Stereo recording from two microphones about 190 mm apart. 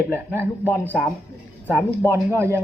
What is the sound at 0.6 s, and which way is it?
Speech, 10° left (ahead or behind).